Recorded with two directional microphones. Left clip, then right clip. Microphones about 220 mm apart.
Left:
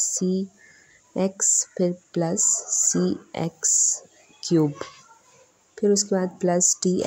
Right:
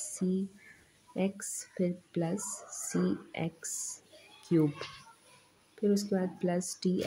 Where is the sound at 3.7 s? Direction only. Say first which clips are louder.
Left 19 dB; 5° left (ahead or behind).